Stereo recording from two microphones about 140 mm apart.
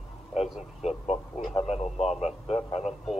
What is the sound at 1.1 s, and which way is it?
Speech, 50° left (ahead or behind).